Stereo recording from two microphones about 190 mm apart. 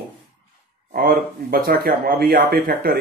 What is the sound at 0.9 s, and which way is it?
Speech, 50° right (ahead or behind).